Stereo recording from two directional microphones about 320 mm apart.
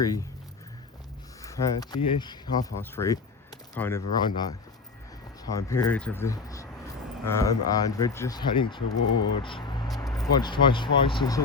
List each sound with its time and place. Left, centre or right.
0.0 s speech: centre
1.5 s speech: centre